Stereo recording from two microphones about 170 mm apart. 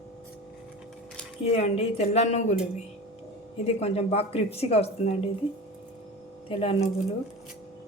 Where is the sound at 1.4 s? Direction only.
35° left (ahead or behind).